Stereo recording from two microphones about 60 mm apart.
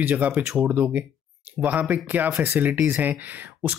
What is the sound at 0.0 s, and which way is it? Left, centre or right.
Speech, right.